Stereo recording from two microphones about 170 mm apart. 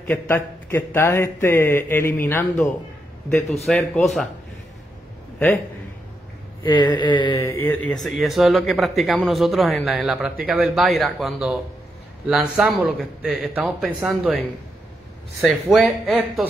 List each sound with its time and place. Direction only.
0.0 s speech: 10° left (ahead or behind)
6.6 s a sound: 25° left (ahead or behind)
7.4 s speech: 10° left (ahead or behind); by 14.3 s 5° right (ahead or behind)
15.4 s speech: centre (ahead or behind)